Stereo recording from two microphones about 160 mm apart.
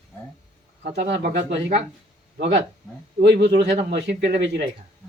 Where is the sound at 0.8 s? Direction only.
75° right (ahead or behind).